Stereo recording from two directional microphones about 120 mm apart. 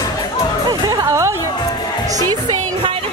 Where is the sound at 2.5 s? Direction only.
50° right (ahead or behind).